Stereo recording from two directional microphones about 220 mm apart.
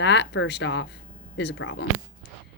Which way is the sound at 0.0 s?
55° left (ahead or behind).